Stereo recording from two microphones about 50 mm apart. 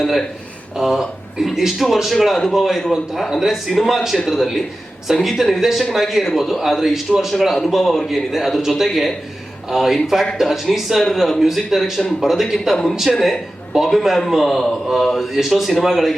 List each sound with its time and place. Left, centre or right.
0.8 s a man's voice: centre
6.2 s a man's voice: centre
6.5 s a man's voice: centre
12.7 s a man's voice: centre